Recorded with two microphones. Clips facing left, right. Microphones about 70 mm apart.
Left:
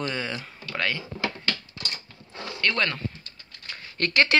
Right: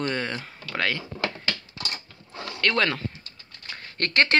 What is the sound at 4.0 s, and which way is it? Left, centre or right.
Speech, right.